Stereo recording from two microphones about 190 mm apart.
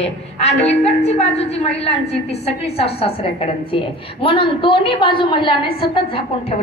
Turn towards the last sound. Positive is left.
turn(degrees=25)  # may be behind; listen again after turning